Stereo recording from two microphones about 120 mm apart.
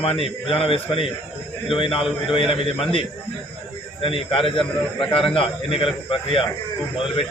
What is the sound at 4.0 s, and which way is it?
A man's voice, 50° left (ahead or behind).